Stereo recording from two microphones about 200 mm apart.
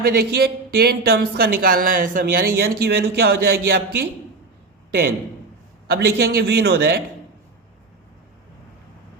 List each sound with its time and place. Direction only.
0.2 s speech: 50° right (ahead or behind)
5.9 s speech: 50° right (ahead or behind)